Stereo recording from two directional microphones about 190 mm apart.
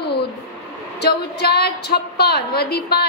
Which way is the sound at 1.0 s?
60° left (ahead or behind).